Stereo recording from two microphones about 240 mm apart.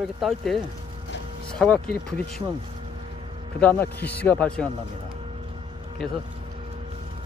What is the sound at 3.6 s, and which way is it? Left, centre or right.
A man's voice, centre.